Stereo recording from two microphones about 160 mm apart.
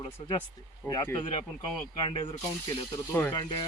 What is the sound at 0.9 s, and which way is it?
Speech, 25° left (ahead or behind).